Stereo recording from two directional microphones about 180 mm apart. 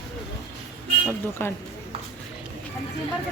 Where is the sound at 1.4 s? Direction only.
15° left (ahead or behind).